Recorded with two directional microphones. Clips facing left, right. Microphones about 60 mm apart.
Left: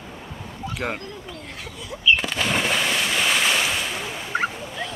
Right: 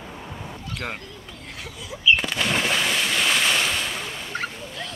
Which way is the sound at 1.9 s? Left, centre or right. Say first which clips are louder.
Even; centre.